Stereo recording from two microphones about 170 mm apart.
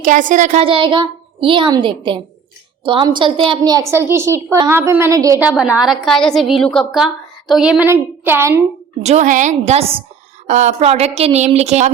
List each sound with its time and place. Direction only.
0.0 s a woman's voice: 50° right (ahead or behind)
0.6 s a woman's voice: 30° right (ahead or behind)
5.5 s a woman's voice: 5° right (ahead or behind)
9.0 s a woman's voice: 45° right (ahead or behind)